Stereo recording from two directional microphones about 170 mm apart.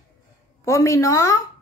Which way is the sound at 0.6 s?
15° left (ahead or behind).